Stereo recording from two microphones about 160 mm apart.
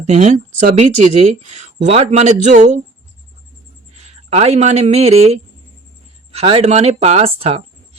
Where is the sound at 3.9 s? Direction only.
45° right (ahead or behind).